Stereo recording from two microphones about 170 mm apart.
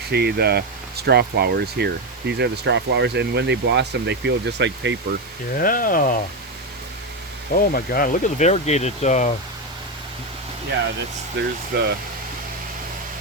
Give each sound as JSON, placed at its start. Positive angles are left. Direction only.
{"t": 0.1, "sound": "speech", "side_deg": -70}
{"t": 5.5, "sound": "speech", "side_deg": 55}
{"t": 7.5, "sound": "speech", "side_deg": 55}
{"t": 11.3, "sound": "speech", "side_deg": -75}